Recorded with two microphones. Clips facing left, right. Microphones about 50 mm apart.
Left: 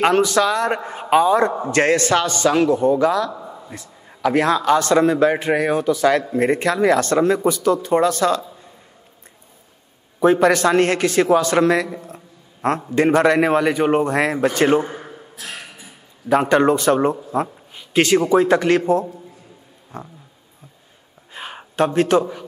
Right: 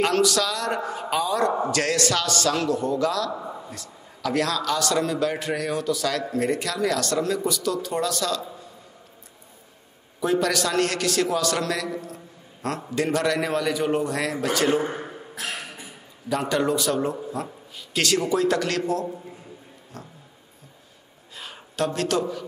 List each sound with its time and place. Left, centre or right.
0.0 s a man's voice: left
3.3 s a sound: centre
3.7 s a man's voice: left
10.2 s speech: left
16.3 s a man's voice: left
21.3 s a sound: left